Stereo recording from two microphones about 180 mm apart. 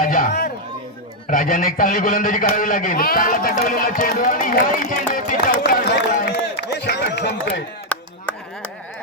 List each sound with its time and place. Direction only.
0.0 s a sound: 50° left (ahead or behind)
1.3 s a man's voice: 50° left (ahead or behind); by 7.6 s 70° left (ahead or behind)
7.9 s chop: 5° left (ahead or behind)